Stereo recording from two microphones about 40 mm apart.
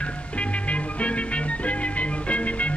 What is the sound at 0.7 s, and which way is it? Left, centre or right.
Music, left.